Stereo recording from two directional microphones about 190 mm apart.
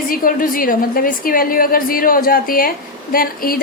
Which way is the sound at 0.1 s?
50° left (ahead or behind).